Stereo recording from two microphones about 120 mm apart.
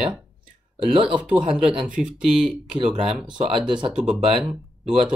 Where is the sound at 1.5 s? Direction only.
5° right (ahead or behind).